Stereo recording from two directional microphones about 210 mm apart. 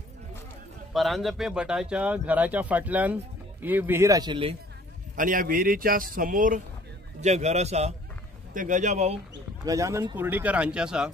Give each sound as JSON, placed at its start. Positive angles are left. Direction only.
{"t": 0.9, "sound": "speech", "side_deg": 0}
{"t": 5.1, "sound": "a man's voice", "side_deg": -40}
{"t": 9.7, "sound": "speech", "side_deg": -15}